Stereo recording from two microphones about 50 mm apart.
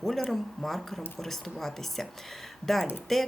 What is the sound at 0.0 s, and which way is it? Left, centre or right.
Speech, centre.